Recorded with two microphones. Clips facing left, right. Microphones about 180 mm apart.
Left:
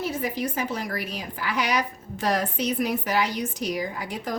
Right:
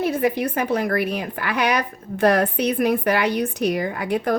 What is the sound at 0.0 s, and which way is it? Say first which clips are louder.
A woman's voice: right 7 dB; 60° right (ahead or behind).